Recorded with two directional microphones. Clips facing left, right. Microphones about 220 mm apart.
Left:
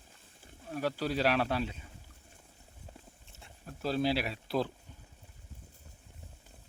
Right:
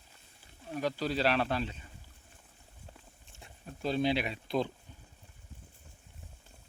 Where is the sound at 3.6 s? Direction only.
5° left (ahead or behind).